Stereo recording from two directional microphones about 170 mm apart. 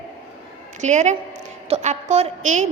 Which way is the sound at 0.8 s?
45° right (ahead or behind).